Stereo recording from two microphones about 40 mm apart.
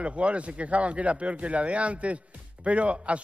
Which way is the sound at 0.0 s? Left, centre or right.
Right.